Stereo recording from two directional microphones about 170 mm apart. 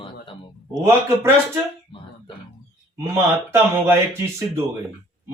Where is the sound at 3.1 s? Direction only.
15° right (ahead or behind).